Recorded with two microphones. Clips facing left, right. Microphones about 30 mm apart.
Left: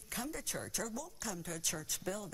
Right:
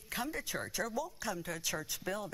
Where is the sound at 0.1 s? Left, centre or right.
Right.